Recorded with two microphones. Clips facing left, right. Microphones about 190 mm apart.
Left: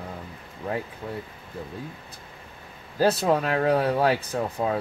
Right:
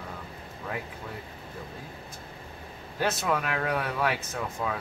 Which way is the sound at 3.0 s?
30° left (ahead or behind).